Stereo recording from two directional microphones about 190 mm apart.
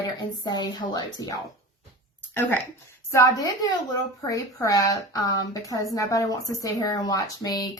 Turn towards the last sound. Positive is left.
turn(degrees=20)  # may be behind; listen again after turning